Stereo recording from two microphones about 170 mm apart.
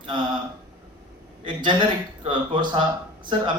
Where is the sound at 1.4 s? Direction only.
30° right (ahead or behind).